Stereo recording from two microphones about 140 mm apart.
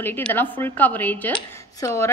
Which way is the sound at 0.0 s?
15° left (ahead or behind).